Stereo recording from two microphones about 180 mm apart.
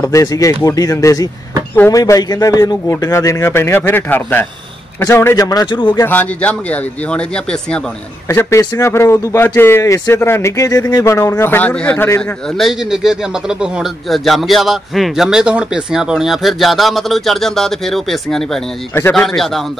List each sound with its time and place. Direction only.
0.0 s speech: 20° left (ahead or behind)
6.0 s speech: 10° left (ahead or behind)
12.5 s speech: centre (ahead or behind)
18.9 s speech: 15° left (ahead or behind)
19.2 s speech: centre (ahead or behind)